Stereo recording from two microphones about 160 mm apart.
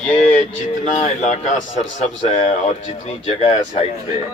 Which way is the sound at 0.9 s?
45° left (ahead or behind).